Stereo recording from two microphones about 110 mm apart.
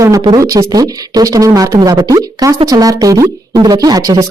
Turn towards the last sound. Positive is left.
turn(degrees=-35)  # may be behind; listen again after turning